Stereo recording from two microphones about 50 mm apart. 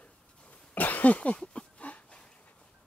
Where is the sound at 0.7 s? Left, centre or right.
Left.